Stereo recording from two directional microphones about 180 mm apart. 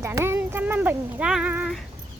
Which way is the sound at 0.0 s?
15° right (ahead or behind).